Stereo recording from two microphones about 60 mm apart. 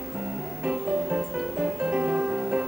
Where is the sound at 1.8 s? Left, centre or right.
Centre.